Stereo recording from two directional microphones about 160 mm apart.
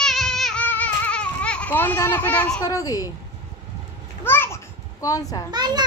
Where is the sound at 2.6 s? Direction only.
20° left (ahead or behind).